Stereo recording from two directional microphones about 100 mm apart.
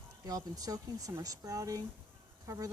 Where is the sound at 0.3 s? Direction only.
40° right (ahead or behind).